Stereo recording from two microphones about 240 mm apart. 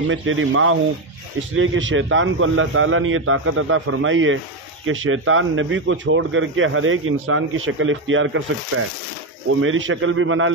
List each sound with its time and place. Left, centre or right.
0.1 s a man's voice: right